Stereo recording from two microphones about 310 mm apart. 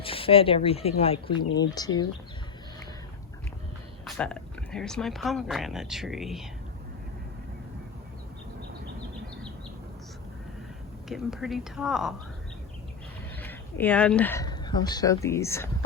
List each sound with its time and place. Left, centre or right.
0.0 s speech: centre
4.0 s speech: centre
11.1 s speech: centre
13.4 s speech: centre